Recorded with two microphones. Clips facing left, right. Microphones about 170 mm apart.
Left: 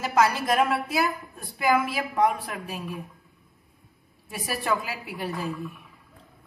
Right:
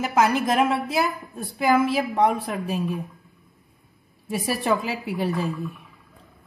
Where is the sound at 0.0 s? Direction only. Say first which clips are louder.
Right 2 dB; 20° right (ahead or behind).